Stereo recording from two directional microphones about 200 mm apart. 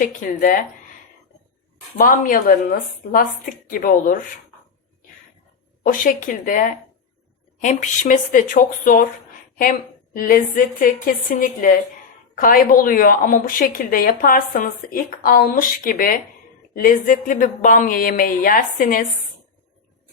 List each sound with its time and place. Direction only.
0.0 s speech: 40° left (ahead or behind)
2.0 s a woman's voice: 45° left (ahead or behind)
5.8 s speech: 40° left (ahead or behind)
10.2 s a woman's voice: 45° left (ahead or behind)